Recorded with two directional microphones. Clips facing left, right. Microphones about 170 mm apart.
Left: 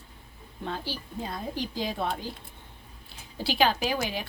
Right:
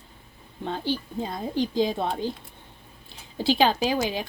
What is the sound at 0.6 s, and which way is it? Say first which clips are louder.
Speech: right 6 dB; 25° right (ahead or behind).